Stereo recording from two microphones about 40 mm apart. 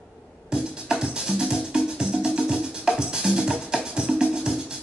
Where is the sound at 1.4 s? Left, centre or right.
Centre.